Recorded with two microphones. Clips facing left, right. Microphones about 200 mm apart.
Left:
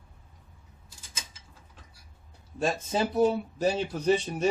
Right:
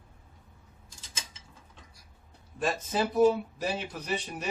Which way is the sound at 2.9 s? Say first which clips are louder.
Right 2 dB; 30° left (ahead or behind).